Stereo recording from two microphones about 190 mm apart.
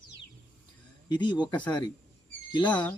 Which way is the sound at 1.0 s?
25° left (ahead or behind).